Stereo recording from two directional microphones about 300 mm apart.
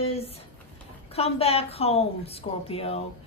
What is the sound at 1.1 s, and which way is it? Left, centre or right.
Speech, centre.